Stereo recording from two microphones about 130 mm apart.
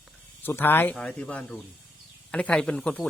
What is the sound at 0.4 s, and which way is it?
Speech, 15° left (ahead or behind).